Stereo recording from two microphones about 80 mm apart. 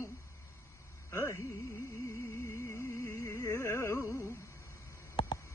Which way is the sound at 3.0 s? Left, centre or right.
Left.